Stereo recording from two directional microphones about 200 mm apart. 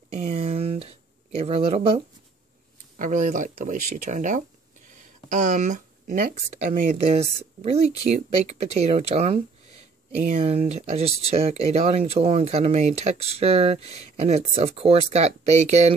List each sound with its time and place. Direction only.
0.2 s a sound: 30° right (ahead or behind)
1.4 s speech: 30° right (ahead or behind)
3.0 s speech: 40° right (ahead or behind)